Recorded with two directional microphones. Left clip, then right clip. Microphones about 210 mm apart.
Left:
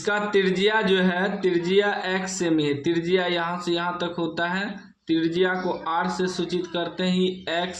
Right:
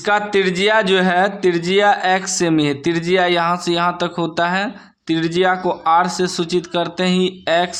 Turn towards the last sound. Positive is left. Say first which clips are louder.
# right 9 dB
turn(degrees=-40)  # may be behind; listen again after turning